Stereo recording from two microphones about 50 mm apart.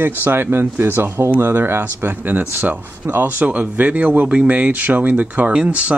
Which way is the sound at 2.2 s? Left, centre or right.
Right.